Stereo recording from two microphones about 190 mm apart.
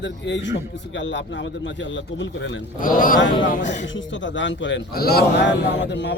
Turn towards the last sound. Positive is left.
turn(degrees=65)  # may be behind; listen again after turning